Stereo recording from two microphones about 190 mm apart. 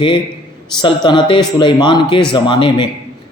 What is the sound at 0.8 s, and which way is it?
A man's voice, 25° left (ahead or behind).